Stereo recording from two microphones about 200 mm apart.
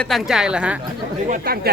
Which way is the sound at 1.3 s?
45° right (ahead or behind).